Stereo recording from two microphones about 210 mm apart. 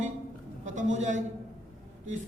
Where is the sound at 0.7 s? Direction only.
35° right (ahead or behind).